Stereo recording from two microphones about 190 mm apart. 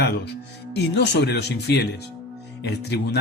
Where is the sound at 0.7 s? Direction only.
65° left (ahead or behind).